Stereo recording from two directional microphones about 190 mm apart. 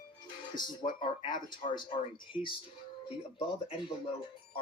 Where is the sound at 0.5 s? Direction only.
25° left (ahead or behind).